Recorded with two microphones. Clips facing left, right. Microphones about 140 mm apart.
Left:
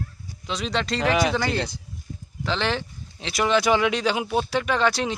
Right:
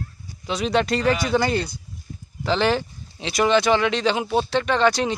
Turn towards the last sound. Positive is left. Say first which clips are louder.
# right 3 dB
turn(degrees=0)  # may be behind; listen again after turning